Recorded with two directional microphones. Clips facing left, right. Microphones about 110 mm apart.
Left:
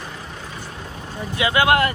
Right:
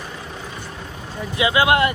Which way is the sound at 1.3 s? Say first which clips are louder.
Even; 20° right (ahead or behind).